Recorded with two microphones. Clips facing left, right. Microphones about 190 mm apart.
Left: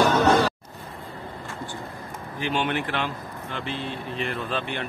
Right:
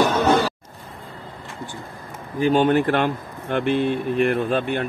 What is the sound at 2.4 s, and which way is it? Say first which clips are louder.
Speech: right 10 dB; 40° right (ahead or behind).